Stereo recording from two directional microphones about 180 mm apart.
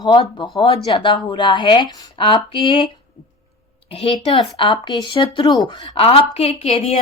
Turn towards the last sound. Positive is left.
turn(degrees=35)  # may be behind; listen again after turning